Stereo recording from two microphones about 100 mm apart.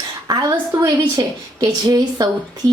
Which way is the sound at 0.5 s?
30° right (ahead or behind).